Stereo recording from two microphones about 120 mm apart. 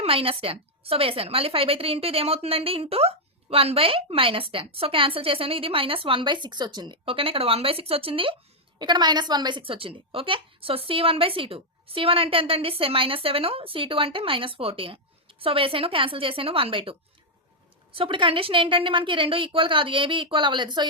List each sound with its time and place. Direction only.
0.0 s a woman's voice: 50° right (ahead or behind)
8.8 s a woman's voice: 35° right (ahead or behind)